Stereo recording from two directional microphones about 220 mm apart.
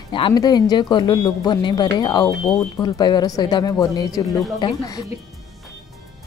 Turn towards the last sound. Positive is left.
turn(degrees=15)  # may be behind; listen again after turning